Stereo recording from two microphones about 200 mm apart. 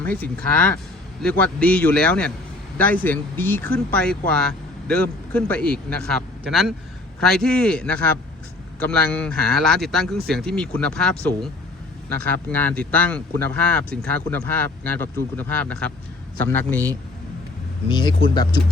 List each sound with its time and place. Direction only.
0.0 s speech: 10° left (ahead or behind)
17.8 s speech: 20° left (ahead or behind)